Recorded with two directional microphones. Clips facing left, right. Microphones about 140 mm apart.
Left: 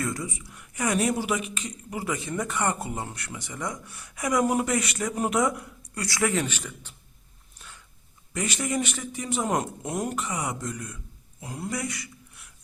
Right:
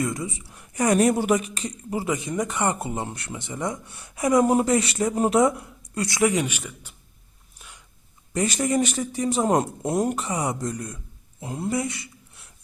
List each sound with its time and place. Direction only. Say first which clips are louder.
0.0 s speech: right 3 dB; 20° right (ahead or behind)
8.3 s a man's voice: right 6 dB; 35° right (ahead or behind)
11.3 s speech: right 6 dB; 25° right (ahead or behind)